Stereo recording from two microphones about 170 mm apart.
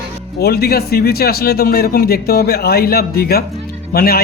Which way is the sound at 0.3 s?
65° left (ahead or behind).